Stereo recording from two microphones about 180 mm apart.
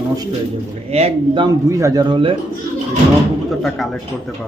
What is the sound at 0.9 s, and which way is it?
Speech, 35° right (ahead or behind).